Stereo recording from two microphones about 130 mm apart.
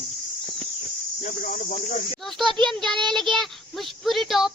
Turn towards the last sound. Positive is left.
turn(degrees=0)  # may be behind; listen again after turning